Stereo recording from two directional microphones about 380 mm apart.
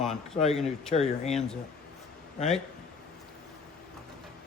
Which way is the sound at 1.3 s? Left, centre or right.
Centre.